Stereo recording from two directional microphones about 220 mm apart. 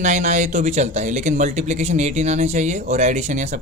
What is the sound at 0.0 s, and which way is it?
Speech, 35° right (ahead or behind).